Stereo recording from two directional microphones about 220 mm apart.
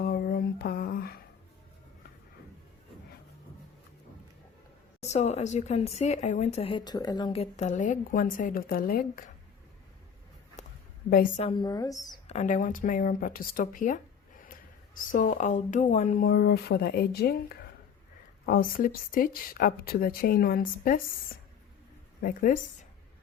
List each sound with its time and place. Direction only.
0.0 s a sound: 45° left (ahead or behind)
4.9 s a woman's voice: 30° left (ahead or behind)
10.6 s a sound: 30° left (ahead or behind)
11.1 s a woman's voice: 40° left (ahead or behind)
11.4 s speech: 20° left (ahead or behind)
12.3 s a woman's voice: 35° left (ahead or behind)
22.2 s a woman's voice: 40° left (ahead or behind)